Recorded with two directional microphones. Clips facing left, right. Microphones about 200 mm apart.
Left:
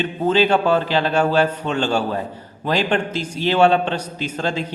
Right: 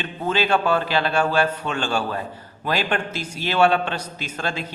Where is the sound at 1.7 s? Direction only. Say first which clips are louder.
Left 4 dB; 20° left (ahead or behind).